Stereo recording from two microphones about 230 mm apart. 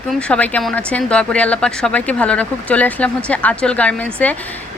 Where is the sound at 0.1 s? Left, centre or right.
Centre.